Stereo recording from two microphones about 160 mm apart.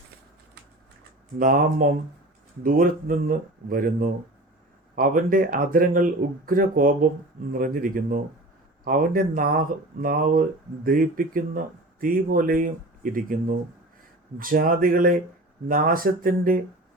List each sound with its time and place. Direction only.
1.4 s speech: 60° right (ahead or behind)